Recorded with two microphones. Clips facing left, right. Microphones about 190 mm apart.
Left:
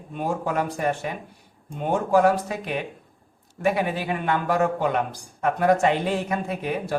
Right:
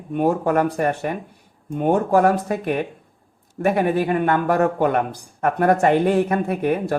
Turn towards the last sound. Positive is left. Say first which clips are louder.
# right 7 dB
turn(degrees=-55)  # may be behind; listen again after turning